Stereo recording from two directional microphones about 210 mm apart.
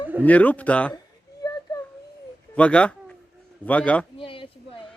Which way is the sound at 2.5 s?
5° left (ahead or behind).